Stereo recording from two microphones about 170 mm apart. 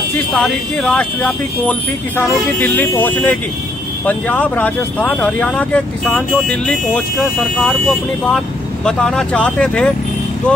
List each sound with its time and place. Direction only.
0.1 s speech: centre (ahead or behind)